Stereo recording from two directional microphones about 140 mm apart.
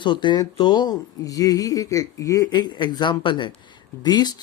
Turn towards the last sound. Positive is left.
turn(degrees=30)  # may be behind; listen again after turning